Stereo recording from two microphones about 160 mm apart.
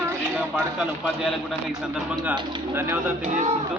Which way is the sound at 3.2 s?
50° right (ahead or behind).